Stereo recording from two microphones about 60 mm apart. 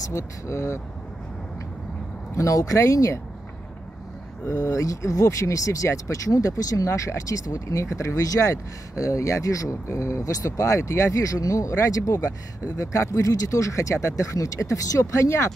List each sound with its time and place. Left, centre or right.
0.0 s speech: left
2.3 s speech: left
4.5 s speech: left